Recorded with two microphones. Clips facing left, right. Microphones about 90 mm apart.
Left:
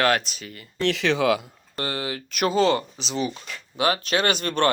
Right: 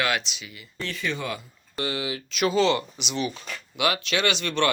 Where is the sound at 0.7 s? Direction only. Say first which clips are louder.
Left 8 dB; 90° left.